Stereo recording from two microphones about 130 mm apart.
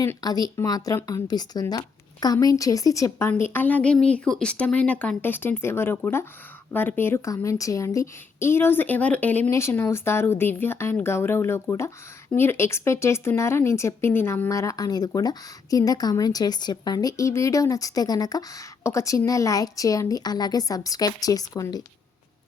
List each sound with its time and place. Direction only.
0.0 s a woman's voice: 25° left (ahead or behind)